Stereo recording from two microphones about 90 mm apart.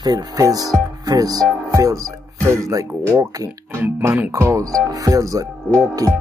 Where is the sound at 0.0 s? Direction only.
45° right (ahead or behind).